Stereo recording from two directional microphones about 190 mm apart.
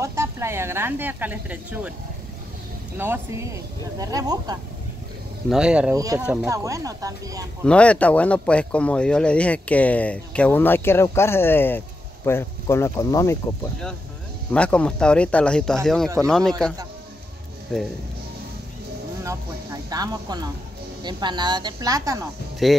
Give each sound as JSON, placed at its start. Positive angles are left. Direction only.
{"t": 0.0, "sound": "speech", "side_deg": -15}
{"t": 3.0, "sound": "speech", "side_deg": -15}
{"t": 5.5, "sound": "speech", "side_deg": -5}
{"t": 5.9, "sound": "speech", "side_deg": -20}
{"t": 6.2, "sound": "speech", "side_deg": -5}
{"t": 6.5, "sound": "speech", "side_deg": -15}
{"t": 7.6, "sound": "speech", "side_deg": 5}
{"t": 14.5, "sound": "speech", "side_deg": 5}
{"t": 19.2, "sound": "speech", "side_deg": -20}
{"t": 22.6, "sound": "speech", "side_deg": 0}